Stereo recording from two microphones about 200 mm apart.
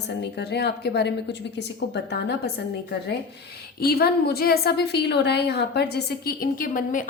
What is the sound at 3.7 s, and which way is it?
A woman's voice, 50° left (ahead or behind).